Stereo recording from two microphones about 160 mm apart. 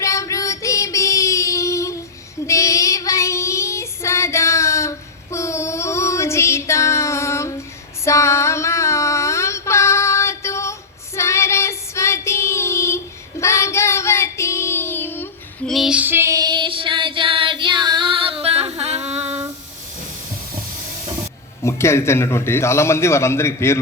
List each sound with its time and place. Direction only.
0.0 s child singing: 20° left (ahead or behind)
8.0 s a sound: 15° left (ahead or behind)
13.4 s child singing: 15° left (ahead or behind)
15.7 s child singing: 5° right (ahead or behind); by 19.4 s 40° right (ahead or behind)
21.6 s a man's voice: 15° left (ahead or behind)